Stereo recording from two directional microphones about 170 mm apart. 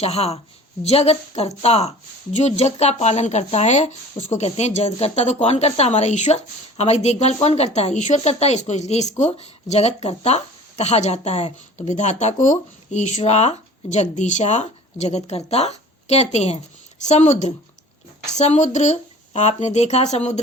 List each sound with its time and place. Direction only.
0.0 s speech: 40° left (ahead or behind)